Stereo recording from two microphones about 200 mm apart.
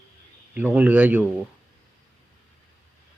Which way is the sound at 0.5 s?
5° right (ahead or behind).